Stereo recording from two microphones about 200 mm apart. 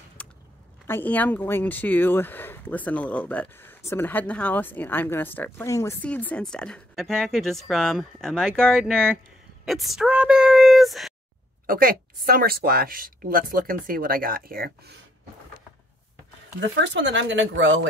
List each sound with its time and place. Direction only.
0.2 s a sound: 5° left (ahead or behind)
0.8 s speech: 10° left (ahead or behind)
11.6 s a woman's voice: 45° right (ahead or behind)
16.5 s speech: 65° right (ahead or behind)